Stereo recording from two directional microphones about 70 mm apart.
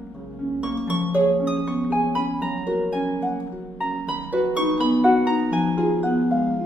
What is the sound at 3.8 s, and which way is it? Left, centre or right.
Harp, right.